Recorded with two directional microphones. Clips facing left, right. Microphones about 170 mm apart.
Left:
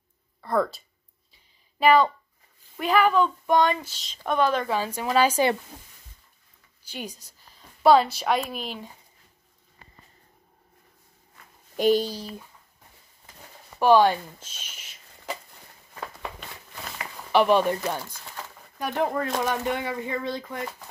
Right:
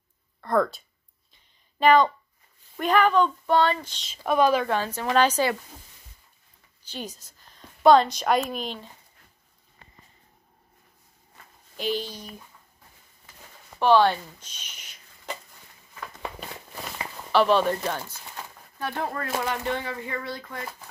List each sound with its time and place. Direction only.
0.4 s speech: 5° left (ahead or behind)
1.3 s a sound: 5° left (ahead or behind)
2.8 s speech: 5° left (ahead or behind)
4.1 s speech: 10° right (ahead or behind)
4.6 s speech: 10° left (ahead or behind)
6.8 s a woman's voice: 10° left (ahead or behind)
11.7 s speech: 45° left (ahead or behind)
13.7 s speech: 10° left (ahead or behind)
17.3 s speech: 15° left (ahead or behind)
18.8 s speech: 15° left (ahead or behind)
19.2 s speech: 10° right (ahead or behind)
19.5 s speech: 10° left (ahead or behind)